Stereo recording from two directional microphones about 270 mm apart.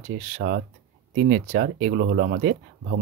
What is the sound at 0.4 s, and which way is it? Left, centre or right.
Speech, right.